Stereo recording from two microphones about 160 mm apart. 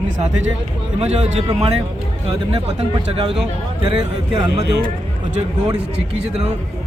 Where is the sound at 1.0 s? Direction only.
40° right (ahead or behind).